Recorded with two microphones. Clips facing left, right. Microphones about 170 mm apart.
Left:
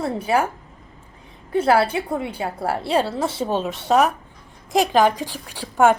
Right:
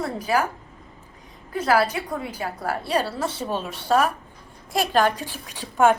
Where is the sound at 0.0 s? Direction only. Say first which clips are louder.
Left 3 dB; 25° left (ahead or behind).